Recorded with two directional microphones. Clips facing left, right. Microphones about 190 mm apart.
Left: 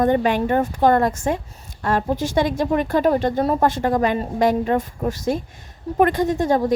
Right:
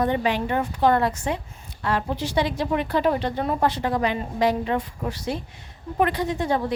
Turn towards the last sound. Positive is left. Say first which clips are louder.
# left 5 dB
turn(degrees=45)  # may be behind; listen again after turning